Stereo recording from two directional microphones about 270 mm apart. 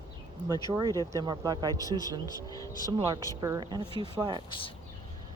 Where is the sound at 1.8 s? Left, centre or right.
Centre.